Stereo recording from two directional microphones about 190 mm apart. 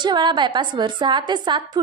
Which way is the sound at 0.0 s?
25° right (ahead or behind).